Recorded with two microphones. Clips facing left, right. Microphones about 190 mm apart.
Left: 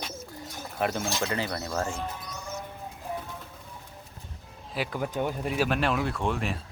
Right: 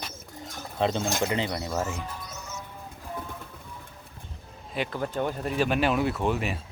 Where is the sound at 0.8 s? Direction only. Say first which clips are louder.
Right 3 dB; 25° right (ahead or behind).